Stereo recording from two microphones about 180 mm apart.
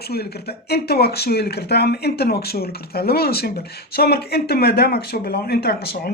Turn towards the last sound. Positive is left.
turn(degrees=60)  # may be behind; listen again after turning